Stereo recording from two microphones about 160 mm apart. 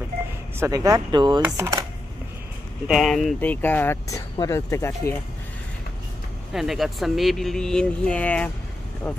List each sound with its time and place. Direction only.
0.6 s speech: 25° right (ahead or behind)
2.9 s speech: centre (ahead or behind)
3.3 s speech: 10° left (ahead or behind)
6.5 s speech: centre (ahead or behind)